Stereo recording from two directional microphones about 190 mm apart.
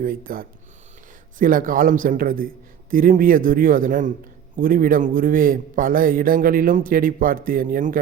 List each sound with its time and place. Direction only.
0.0 s a man's voice: 50° right (ahead or behind)